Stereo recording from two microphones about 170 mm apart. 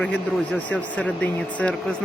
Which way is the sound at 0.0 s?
10° left (ahead or behind).